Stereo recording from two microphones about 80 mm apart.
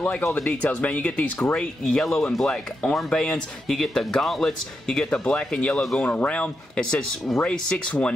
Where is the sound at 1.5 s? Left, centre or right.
Centre.